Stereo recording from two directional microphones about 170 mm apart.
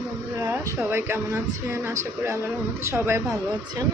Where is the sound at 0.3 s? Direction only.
15° right (ahead or behind).